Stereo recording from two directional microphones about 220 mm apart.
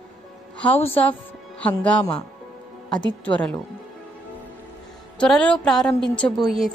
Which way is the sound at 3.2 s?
5° left (ahead or behind).